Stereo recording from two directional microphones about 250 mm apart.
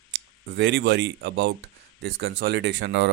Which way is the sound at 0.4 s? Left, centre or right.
Right.